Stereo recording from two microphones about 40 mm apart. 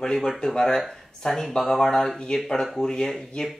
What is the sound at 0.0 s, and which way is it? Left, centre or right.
Speech, centre.